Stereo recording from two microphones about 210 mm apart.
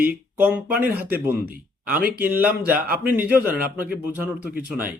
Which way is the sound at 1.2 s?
10° right (ahead or behind).